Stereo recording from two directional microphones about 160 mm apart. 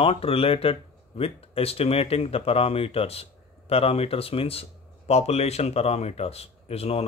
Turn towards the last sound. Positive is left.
turn(degrees=40)  # may be behind; listen again after turning